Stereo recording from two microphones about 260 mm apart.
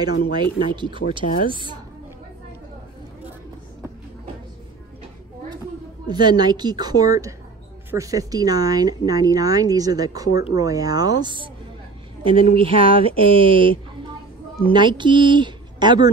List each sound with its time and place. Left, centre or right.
0.3 s speech: centre
6.0 s speech: centre